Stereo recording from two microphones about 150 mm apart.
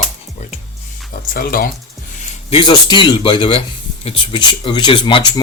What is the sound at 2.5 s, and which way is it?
Speech, 35° left (ahead or behind).